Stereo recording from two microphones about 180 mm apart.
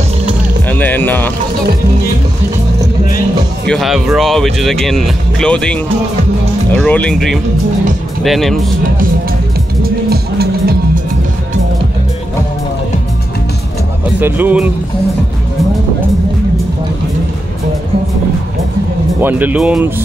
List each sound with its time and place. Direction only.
0.7 s music: 10° left (ahead or behind)
3.6 s speech: centre (ahead or behind)
10.0 s music: 60° right (ahead or behind)
14.2 s speech: 10° right (ahead or behind)
19.2 s speech: 10° right (ahead or behind)